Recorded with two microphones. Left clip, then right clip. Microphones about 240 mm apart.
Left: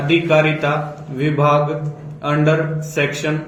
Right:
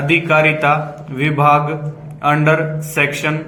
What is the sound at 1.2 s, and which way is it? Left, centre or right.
Speech, centre.